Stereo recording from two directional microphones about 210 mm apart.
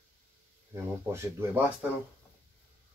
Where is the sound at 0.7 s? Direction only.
10° right (ahead or behind).